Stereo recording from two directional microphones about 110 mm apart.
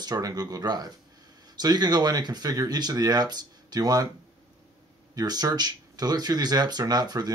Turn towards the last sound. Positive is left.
turn(degrees=-40)  # may be behind; listen again after turning